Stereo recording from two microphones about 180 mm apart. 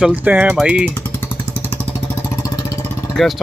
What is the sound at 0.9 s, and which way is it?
Vehicle, 10° left (ahead or behind).